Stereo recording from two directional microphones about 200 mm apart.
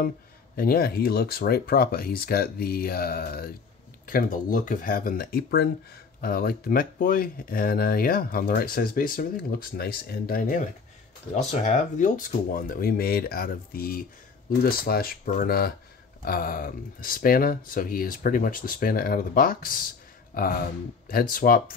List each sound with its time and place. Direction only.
0.6 s speech: 50° left (ahead or behind)